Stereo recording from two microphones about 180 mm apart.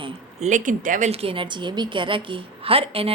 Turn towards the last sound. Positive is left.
turn(degrees=-30)  # may be behind; listen again after turning